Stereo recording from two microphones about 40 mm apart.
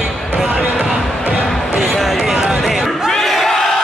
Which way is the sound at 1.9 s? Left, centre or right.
Centre.